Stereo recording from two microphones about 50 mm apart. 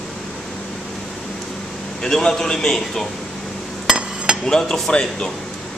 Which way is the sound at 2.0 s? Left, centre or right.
Centre.